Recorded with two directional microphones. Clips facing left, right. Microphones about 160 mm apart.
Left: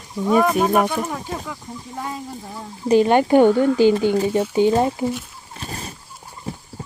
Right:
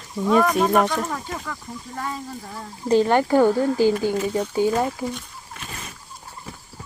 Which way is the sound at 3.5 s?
30° right (ahead or behind).